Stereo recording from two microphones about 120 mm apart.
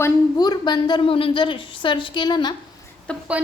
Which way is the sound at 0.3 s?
35° left (ahead or behind).